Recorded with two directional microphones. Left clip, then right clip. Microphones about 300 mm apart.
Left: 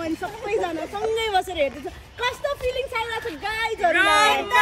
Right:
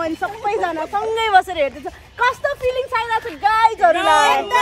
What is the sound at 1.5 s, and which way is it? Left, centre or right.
Speech, centre.